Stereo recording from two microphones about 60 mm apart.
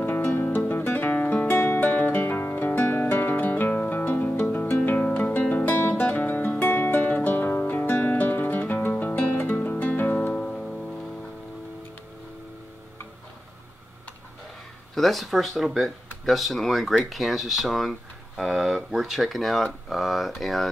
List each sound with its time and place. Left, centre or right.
0.0 s music: left
1.5 s music: left
10.1 s music: centre
15.0 s speech: centre